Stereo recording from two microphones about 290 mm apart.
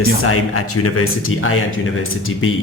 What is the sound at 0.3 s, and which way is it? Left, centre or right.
Speech, left.